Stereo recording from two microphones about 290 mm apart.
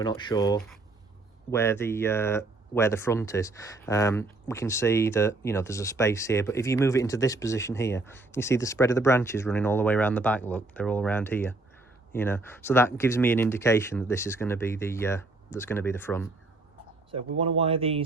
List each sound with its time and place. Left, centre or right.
0.0 s speech: centre
17.1 s speech: centre